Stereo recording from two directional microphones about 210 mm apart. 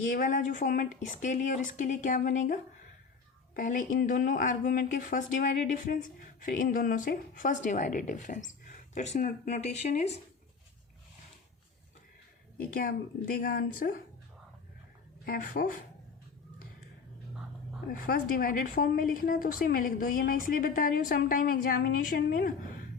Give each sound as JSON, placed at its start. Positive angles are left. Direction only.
{"t": 0.1, "sound": "a woman's voice", "side_deg": 40}
{"t": 12.5, "sound": "a woman's voice", "side_deg": 45}
{"t": 15.2, "sound": "a woman's voice", "side_deg": 45}
{"t": 17.8, "sound": "a woman's voice", "side_deg": 45}